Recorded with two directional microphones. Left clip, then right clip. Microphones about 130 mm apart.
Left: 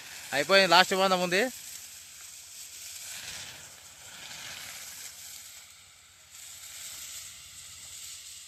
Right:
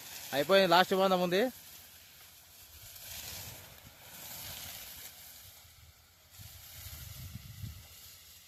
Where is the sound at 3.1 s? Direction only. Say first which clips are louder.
Left 3 dB; 15° right (ahead or behind).